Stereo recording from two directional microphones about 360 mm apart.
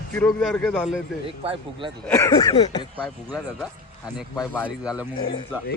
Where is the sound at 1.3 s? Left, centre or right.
Centre.